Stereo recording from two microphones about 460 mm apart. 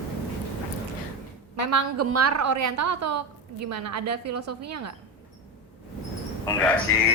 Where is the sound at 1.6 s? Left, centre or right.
Right.